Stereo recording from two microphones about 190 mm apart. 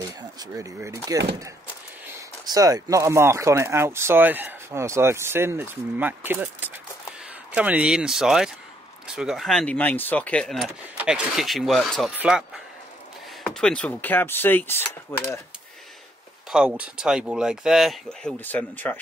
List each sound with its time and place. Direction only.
0.4 s speech: 15° right (ahead or behind); by 15.4 s 15° left (ahead or behind)
16.4 s speech: 5° right (ahead or behind)